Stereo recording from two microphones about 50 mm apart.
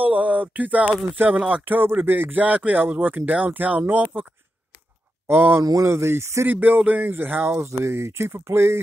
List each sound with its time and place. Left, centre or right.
0.0 s a sound: right
1.1 s speech: right
5.3 s speech: right
5.6 s speech: right
6.4 s speech: right
7.1 s speech: right
7.4 s speech: right